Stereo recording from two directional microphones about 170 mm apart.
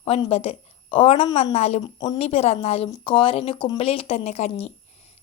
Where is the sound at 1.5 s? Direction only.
40° left (ahead or behind).